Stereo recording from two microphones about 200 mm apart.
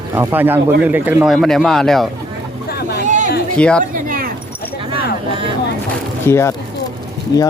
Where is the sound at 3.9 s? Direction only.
45° right (ahead or behind).